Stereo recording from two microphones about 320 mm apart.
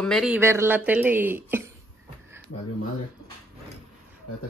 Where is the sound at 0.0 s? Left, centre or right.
Centre.